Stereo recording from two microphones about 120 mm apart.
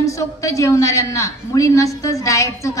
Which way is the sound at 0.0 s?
25° left (ahead or behind).